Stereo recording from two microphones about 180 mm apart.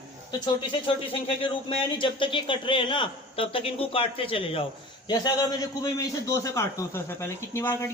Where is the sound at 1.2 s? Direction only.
30° left (ahead or behind).